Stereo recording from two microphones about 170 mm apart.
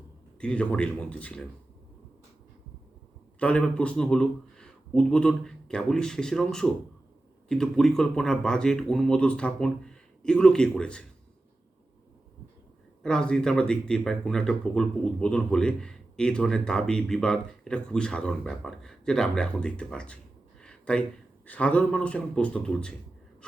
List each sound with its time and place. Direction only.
0.3 s speech: 5° left (ahead or behind)
3.4 s speech: 5° left (ahead or behind)
13.0 s speech: 5° left (ahead or behind)
20.6 s a sound: 5° left (ahead or behind)
21.4 s speech: 10° left (ahead or behind)